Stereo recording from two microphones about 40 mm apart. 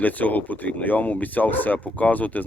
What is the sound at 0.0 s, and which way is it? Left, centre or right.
Speech, left.